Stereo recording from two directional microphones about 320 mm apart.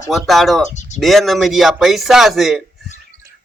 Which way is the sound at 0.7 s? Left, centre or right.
Left.